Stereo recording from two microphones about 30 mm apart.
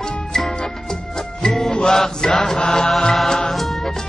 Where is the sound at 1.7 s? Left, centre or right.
Left.